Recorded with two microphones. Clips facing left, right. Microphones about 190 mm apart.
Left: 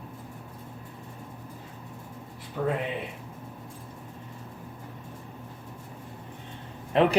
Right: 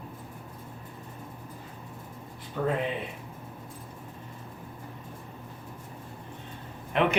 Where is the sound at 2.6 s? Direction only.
15° left (ahead or behind).